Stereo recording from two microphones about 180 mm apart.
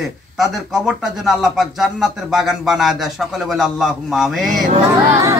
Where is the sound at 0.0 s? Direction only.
Centre (ahead or behind).